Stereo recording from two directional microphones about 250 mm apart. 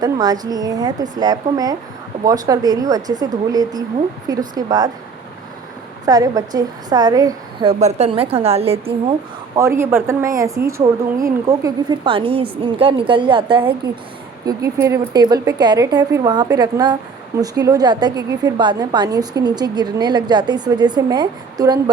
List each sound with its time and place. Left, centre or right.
0.0 s a woman's voice: centre
6.1 s a woman's voice: centre
9.6 s a woman's voice: centre